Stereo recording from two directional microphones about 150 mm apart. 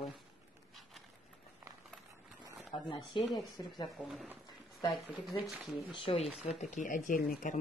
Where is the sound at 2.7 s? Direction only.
30° left (ahead or behind).